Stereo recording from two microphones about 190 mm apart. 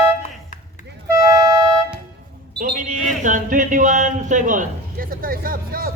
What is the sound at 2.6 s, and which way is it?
Speech, 45° right (ahead or behind).